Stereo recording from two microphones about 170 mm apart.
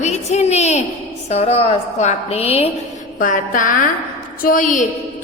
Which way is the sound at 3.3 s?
50° left (ahead or behind).